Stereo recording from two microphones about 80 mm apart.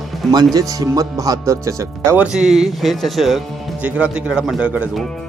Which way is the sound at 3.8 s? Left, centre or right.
Centre.